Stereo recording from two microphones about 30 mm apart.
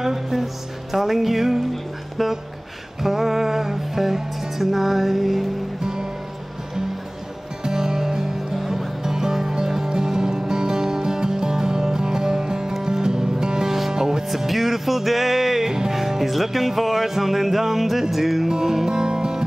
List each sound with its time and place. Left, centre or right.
0.0 s music: centre
7.6 s music: centre
13.7 s music: centre
13.9 s music: right
14.3 s music: centre
15.6 s music: right
15.9 s music: centre
18.5 s music: centre